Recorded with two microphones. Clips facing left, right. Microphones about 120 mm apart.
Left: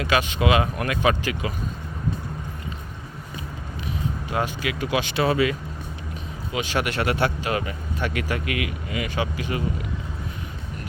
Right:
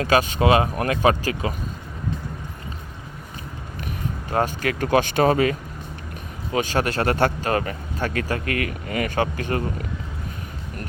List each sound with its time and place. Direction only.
0.0 s speech: 40° right (ahead or behind)
4.3 s speech: 45° right (ahead or behind)